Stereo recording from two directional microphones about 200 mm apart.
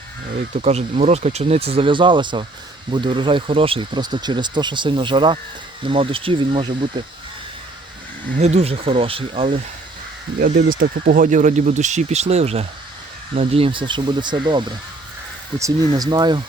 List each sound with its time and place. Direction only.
0.6 s speech: 35° right (ahead or behind)
8.4 s speech: 35° right (ahead or behind)
10.4 s speech: 45° right (ahead or behind); by 16.4 s 20° right (ahead or behind)